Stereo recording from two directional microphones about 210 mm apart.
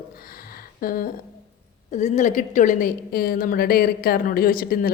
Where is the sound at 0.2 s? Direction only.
45° left (ahead or behind).